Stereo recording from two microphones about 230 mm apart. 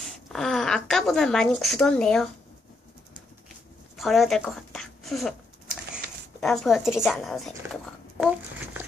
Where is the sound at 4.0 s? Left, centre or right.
Centre.